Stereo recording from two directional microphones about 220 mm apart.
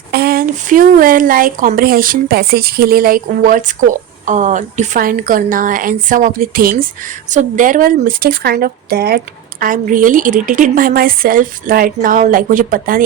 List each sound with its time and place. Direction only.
0.1 s speech: 45° right (ahead or behind)